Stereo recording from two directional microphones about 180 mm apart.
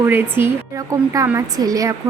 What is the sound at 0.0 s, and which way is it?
Speech, 10° right (ahead or behind).